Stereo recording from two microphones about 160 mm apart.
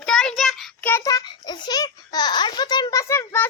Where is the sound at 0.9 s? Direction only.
20° left (ahead or behind).